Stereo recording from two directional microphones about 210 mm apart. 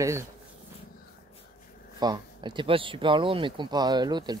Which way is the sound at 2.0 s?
20° right (ahead or behind).